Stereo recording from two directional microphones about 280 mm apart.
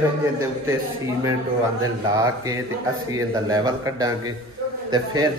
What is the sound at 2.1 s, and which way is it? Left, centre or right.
A man's voice, centre.